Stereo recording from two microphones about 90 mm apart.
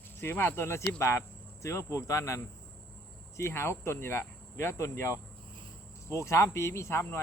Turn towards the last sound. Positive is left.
turn(degrees=30)  # may be behind; listen again after turning